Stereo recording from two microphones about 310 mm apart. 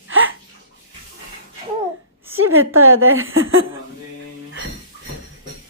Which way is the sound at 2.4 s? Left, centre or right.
Right.